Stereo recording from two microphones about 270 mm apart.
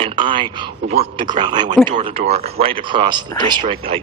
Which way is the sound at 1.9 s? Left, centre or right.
Right.